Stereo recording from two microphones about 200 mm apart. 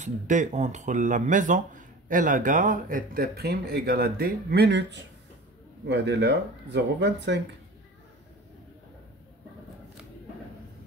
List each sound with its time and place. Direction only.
0.0 s speech: 35° right (ahead or behind); by 7.4 s 60° right (ahead or behind)